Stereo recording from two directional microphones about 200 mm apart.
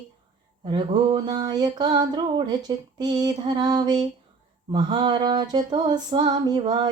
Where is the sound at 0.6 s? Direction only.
25° right (ahead or behind).